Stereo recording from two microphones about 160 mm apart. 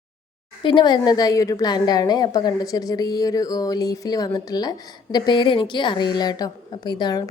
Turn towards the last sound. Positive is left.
turn(degrees=25)  # may be behind; listen again after turning